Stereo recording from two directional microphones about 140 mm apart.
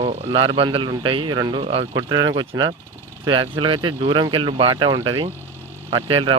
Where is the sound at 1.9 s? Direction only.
30° right (ahead or behind).